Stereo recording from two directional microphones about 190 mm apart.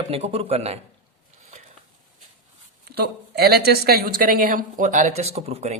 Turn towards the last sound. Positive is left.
turn(degrees=-35)  # may be behind; listen again after turning